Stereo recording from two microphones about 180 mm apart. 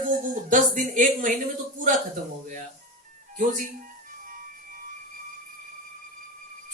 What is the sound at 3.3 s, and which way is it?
Speech, 45° right (ahead or behind).